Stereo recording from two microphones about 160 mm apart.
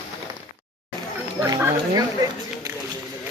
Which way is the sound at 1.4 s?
20° right (ahead or behind).